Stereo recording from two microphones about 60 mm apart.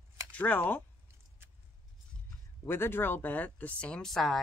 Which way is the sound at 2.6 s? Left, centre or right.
Left.